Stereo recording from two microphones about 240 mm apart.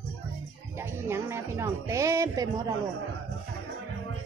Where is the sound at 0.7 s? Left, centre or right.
Centre.